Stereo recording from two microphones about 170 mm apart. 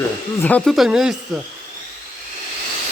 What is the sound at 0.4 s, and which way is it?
Speech, 5° left (ahead or behind).